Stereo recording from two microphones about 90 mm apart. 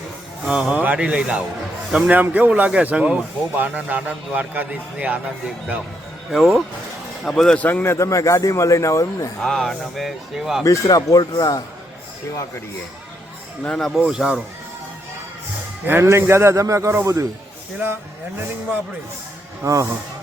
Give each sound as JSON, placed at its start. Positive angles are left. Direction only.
{"t": 0.4, "sound": "a man's voice", "side_deg": -10}
{"t": 2.1, "sound": "a man's voice", "side_deg": -20}
{"t": 6.3, "sound": "speech", "side_deg": 0}
{"t": 7.6, "sound": "a man's voice", "side_deg": 20}
{"t": 7.9, "sound": "a man's voice", "side_deg": 35}
{"t": 9.4, "sound": "speech", "side_deg": 5}
{"t": 10.6, "sound": "speech", "side_deg": 40}
{"t": 13.7, "sound": "speech", "side_deg": 5}
{"t": 14.0, "sound": "a man's voice", "side_deg": -10}
{"t": 15.9, "sound": "a man's voice", "side_deg": -30}
{"t": 19.6, "sound": "a man's voice", "side_deg": -35}